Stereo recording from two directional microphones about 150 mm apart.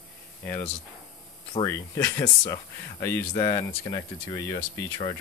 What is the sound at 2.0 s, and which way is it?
Speech, 10° left (ahead or behind).